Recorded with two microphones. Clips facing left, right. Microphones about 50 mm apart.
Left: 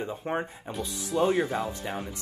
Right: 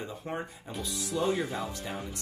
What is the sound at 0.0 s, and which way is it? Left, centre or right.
Speech, left.